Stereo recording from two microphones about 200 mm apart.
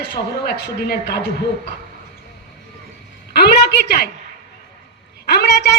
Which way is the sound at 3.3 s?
50° left (ahead or behind).